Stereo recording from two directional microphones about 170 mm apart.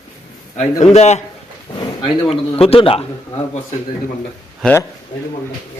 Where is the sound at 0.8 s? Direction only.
40° left (ahead or behind).